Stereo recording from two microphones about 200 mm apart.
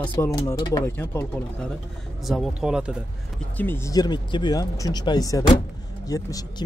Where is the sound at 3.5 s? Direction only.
10° left (ahead or behind).